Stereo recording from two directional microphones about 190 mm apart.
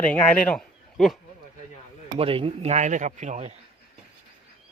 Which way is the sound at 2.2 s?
30° right (ahead or behind).